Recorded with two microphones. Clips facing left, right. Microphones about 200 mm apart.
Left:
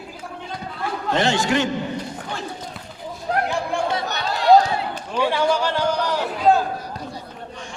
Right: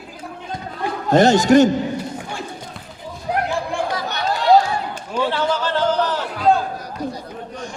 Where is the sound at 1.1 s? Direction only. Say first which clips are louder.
Right 8 dB; 40° right (ahead or behind).